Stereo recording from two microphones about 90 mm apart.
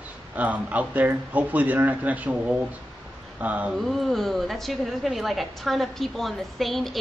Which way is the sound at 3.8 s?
Centre (ahead or behind).